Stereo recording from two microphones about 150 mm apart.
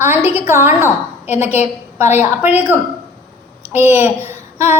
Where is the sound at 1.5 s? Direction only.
50° left (ahead or behind).